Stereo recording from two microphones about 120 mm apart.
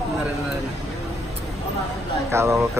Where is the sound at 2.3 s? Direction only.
20° right (ahead or behind).